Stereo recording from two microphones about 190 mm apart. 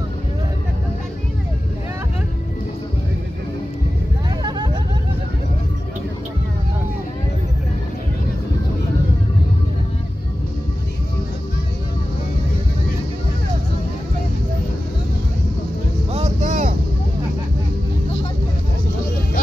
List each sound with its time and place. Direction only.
4.4 s hubbub: 20° right (ahead or behind)
16.1 s vehicle: 35° right (ahead or behind)